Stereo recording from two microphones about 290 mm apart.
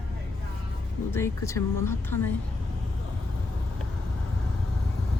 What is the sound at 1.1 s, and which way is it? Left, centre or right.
Speech, centre.